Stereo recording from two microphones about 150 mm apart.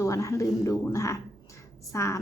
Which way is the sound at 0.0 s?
20° left (ahead or behind).